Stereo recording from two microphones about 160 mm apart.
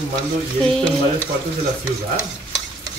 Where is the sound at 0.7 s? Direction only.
10° left (ahead or behind).